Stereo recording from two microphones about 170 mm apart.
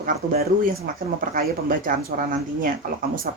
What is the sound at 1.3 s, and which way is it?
Speech, 55° right (ahead or behind).